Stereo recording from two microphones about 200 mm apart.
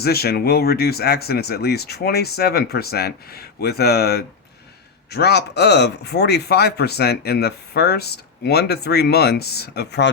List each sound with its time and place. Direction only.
0.0 s speech: 50° left (ahead or behind)